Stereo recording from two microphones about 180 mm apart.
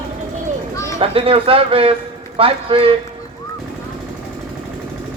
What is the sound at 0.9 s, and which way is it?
Speech, 30° right (ahead or behind).